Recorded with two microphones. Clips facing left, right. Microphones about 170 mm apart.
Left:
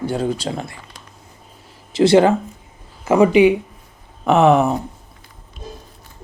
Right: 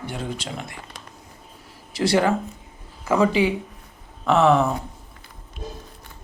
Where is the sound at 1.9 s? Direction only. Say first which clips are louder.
Left 7 dB; 25° left (ahead or behind).